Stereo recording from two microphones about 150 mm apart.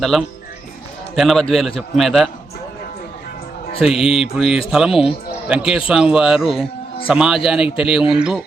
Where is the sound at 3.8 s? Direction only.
5° right (ahead or behind).